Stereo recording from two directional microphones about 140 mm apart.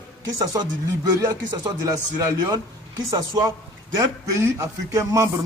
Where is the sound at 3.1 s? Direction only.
25° right (ahead or behind).